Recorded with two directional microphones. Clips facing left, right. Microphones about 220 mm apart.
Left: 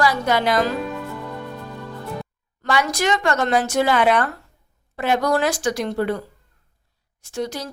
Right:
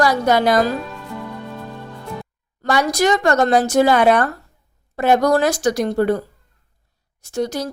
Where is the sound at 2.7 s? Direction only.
40° right (ahead or behind).